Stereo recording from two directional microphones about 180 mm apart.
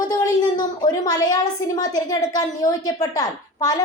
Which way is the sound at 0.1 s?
20° left (ahead or behind).